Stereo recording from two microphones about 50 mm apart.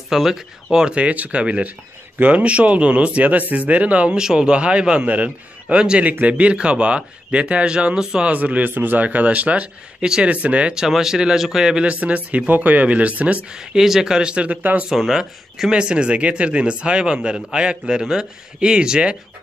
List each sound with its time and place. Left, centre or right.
0.1 s speech: centre
0.9 s a man's voice: right
4.2 s a man's voice: centre
8.3 s a man's voice: right
10.0 s speech: centre
10.3 s a man's voice: right
10.7 s speech: centre
11.9 s a man's voice: right
13.5 s speech: centre
14.6 s speech: right
14.9 s speech: centre
15.7 s a man's voice: centre